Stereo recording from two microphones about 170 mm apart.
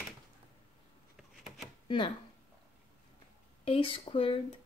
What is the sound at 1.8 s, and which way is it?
Speech, 30° left (ahead or behind).